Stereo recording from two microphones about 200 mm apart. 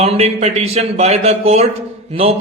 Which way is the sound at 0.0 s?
30° right (ahead or behind).